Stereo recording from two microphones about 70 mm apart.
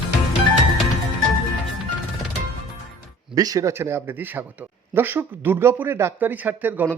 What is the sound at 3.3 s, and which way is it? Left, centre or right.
Speech, right.